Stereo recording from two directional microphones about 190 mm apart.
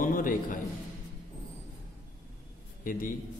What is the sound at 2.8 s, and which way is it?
Speech, 45° left (ahead or behind).